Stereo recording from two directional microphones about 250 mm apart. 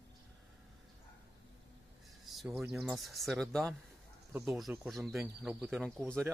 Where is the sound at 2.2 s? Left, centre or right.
Centre.